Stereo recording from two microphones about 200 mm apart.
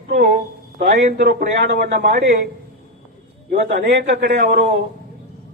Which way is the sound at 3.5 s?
45° right (ahead or behind).